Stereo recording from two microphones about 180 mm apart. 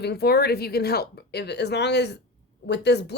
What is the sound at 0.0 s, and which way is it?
Speech, 65° left (ahead or behind).